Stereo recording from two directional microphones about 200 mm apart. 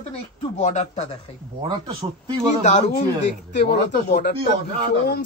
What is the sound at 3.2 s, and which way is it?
A man's voice, 55° left (ahead or behind).